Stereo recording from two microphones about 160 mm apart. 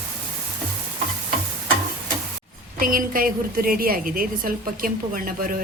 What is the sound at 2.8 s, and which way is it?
A woman's voice, 60° right (ahead or behind).